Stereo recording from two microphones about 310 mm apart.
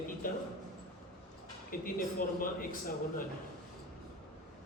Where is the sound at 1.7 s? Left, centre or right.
Left.